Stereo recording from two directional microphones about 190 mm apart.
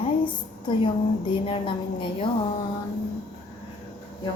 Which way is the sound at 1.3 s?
25° left (ahead or behind).